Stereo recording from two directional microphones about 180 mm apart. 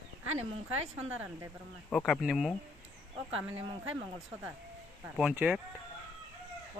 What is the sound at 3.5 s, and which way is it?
Speech, 35° right (ahead or behind).